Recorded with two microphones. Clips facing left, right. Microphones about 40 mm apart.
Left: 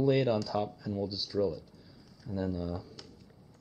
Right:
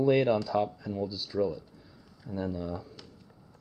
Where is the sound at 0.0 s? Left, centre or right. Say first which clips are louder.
Right 3 dB; centre.